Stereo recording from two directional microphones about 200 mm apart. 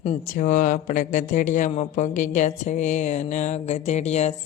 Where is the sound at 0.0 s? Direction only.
30° left (ahead or behind).